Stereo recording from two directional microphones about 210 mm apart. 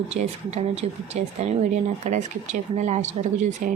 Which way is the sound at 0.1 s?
30° right (ahead or behind).